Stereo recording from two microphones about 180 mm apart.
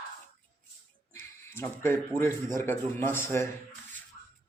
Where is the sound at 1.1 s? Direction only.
15° left (ahead or behind).